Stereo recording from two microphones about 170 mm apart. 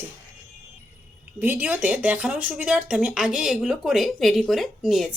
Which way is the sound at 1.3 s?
10° right (ahead or behind).